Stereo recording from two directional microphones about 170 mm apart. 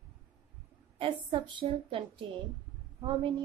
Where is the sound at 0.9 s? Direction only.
30° right (ahead or behind).